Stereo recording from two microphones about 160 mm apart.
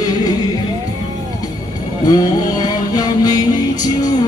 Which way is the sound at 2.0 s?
25° left (ahead or behind).